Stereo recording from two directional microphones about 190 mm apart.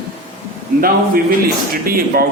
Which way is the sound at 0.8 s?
50° right (ahead or behind).